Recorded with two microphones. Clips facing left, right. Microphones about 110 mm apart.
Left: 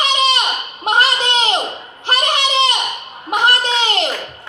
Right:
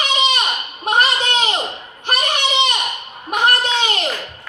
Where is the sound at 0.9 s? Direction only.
30° left (ahead or behind).